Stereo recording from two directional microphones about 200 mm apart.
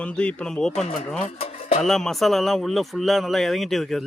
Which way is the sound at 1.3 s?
30° left (ahead or behind).